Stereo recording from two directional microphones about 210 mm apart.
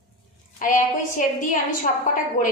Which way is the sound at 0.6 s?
35° left (ahead or behind).